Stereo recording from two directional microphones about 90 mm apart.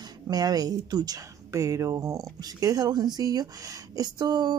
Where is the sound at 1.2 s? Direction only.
35° right (ahead or behind); by 4.5 s 50° right (ahead or behind).